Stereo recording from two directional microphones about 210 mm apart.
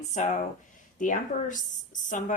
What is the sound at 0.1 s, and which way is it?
Speech, 35° left (ahead or behind).